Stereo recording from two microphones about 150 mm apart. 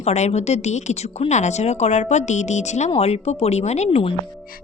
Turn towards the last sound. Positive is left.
turn(degrees=45)  # may be behind; listen again after turning